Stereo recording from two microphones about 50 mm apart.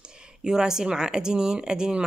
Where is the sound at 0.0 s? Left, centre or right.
Centre.